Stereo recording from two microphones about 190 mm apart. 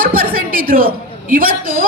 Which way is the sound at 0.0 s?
50° right (ahead or behind).